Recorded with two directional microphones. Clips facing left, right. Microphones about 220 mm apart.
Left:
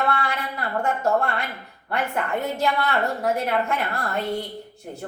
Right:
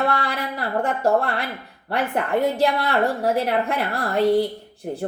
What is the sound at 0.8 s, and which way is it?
Speech, 35° right (ahead or behind).